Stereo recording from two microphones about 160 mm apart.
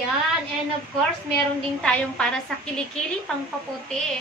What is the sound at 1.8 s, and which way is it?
A woman's voice, 5° left (ahead or behind).